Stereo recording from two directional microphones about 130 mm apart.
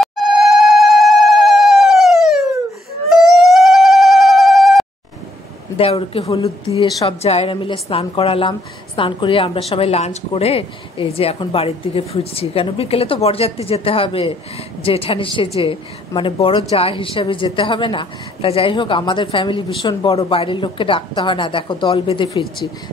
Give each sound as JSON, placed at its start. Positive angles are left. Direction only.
{"t": 0.0, "sound": "telephone bell ringing", "side_deg": 0}
{"t": 3.1, "sound": "a sound", "side_deg": 0}
{"t": 5.8, "sound": "a woman's voice", "side_deg": 50}